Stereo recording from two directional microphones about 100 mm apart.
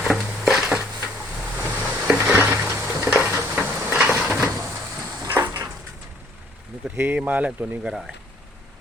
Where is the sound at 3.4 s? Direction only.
15° right (ahead or behind).